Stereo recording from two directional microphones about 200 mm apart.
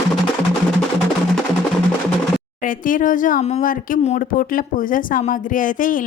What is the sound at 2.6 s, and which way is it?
Speech, 40° left (ahead or behind).